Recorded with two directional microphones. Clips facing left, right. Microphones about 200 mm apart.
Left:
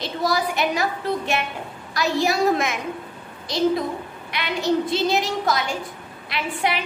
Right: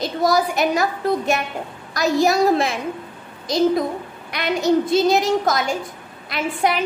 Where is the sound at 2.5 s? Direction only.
30° right (ahead or behind).